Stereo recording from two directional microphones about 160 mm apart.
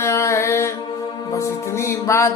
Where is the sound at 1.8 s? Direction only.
15° left (ahead or behind).